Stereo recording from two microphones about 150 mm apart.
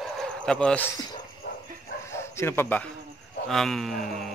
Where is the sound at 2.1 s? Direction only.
15° left (ahead or behind).